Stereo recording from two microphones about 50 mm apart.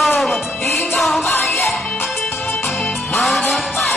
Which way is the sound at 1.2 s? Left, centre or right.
Left.